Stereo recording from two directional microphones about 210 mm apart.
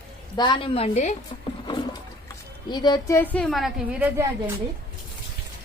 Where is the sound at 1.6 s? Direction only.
20° left (ahead or behind).